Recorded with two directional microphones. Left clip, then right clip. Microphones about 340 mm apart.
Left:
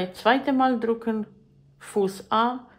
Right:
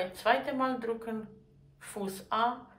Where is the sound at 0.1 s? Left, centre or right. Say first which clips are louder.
Left 9 dB; centre.